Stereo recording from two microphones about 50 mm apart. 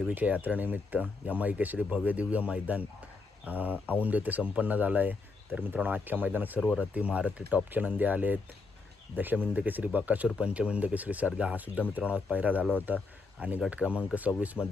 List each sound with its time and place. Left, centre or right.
0.1 s speech: right
10.4 s speech: right